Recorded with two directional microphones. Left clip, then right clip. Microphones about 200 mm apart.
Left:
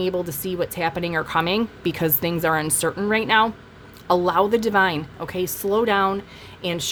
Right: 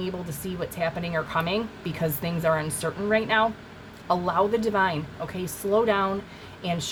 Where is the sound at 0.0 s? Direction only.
45° left (ahead or behind).